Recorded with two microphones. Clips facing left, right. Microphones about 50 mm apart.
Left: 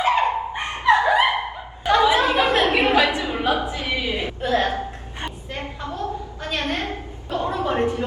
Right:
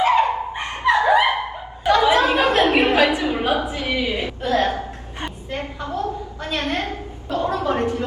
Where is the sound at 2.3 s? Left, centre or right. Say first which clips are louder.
Right 1 dB; left.